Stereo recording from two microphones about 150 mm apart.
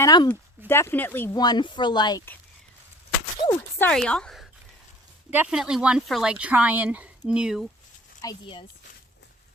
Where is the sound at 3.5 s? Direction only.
15° left (ahead or behind).